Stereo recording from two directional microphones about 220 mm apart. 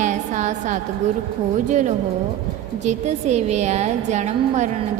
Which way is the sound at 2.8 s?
30° right (ahead or behind).